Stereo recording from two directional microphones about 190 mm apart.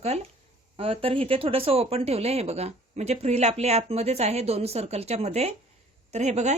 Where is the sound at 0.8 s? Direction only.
30° right (ahead or behind).